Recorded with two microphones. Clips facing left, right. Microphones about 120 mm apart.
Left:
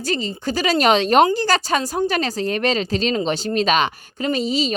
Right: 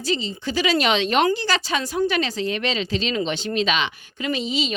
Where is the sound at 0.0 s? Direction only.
50° left (ahead or behind).